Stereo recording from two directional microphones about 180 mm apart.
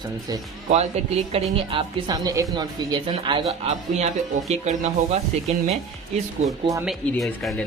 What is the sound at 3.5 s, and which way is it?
Speech, 40° right (ahead or behind).